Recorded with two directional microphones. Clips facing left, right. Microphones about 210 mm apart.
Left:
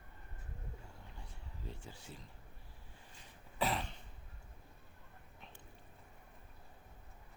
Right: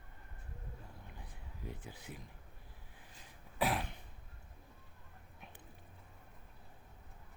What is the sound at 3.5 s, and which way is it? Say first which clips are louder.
Throat clearing: right 2 dB; 15° right (ahead or behind).